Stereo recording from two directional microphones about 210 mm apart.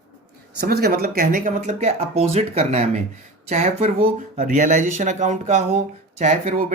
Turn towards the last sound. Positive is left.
turn(degrees=-40)  # may be behind; listen again after turning